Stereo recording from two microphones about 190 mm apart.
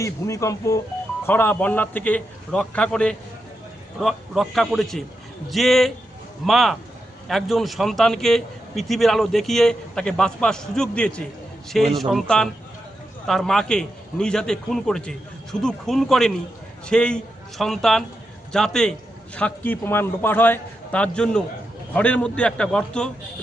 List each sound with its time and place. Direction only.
0.0 s a man's voice: 15° left (ahead or behind)